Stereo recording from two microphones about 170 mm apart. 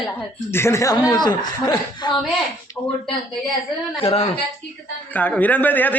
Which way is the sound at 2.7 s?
20° left (ahead or behind).